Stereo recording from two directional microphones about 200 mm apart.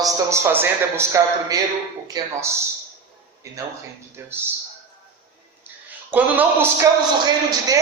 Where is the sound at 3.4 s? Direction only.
15° right (ahead or behind).